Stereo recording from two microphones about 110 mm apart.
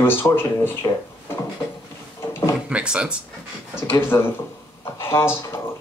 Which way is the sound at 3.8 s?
20° left (ahead or behind).